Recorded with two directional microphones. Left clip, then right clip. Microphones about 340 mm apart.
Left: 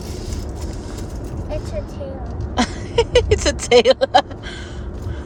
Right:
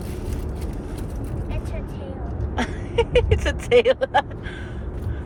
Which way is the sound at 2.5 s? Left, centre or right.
Left.